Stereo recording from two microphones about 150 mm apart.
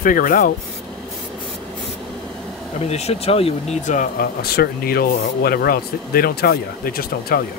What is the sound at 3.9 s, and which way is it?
Speech, 70° left (ahead or behind).